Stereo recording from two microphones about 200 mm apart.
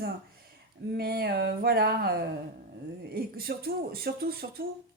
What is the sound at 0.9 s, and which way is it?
Speech, 50° right (ahead or behind).